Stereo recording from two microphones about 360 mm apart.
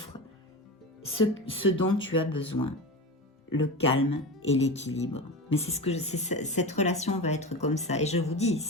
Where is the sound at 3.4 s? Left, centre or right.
Left.